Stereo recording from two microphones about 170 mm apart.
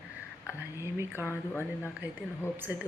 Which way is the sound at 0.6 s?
15° right (ahead or behind).